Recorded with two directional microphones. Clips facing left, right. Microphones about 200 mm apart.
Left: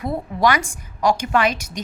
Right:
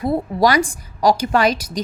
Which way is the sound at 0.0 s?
35° right (ahead or behind).